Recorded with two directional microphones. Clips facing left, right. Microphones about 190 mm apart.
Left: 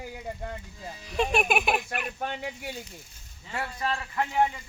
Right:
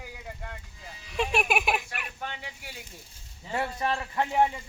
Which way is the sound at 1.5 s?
5° right (ahead or behind).